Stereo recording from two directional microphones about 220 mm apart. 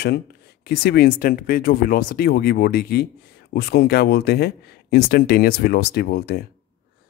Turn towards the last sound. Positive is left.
turn(degrees=45)  # may be behind; listen again after turning